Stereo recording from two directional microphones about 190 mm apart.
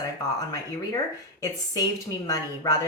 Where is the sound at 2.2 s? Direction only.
20° left (ahead or behind).